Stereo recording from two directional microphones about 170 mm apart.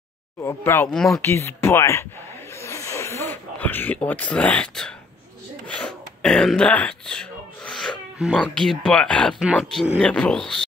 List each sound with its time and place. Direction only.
0.4 s speech: 15° left (ahead or behind)
0.9 s speech: centre (ahead or behind)
1.2 s speech: 15° left (ahead or behind)
2.5 s a sound: 15° left (ahead or behind)
5.7 s speech: 5° left (ahead or behind)